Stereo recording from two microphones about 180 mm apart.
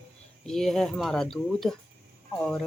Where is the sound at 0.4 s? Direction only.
Centre (ahead or behind).